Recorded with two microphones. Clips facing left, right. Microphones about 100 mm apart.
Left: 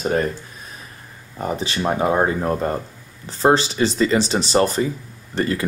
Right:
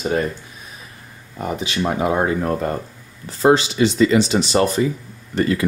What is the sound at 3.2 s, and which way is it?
Speech, 35° left (ahead or behind).